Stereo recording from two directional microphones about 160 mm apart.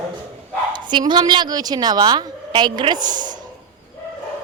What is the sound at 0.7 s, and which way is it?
A woman's voice, 30° right (ahead or behind).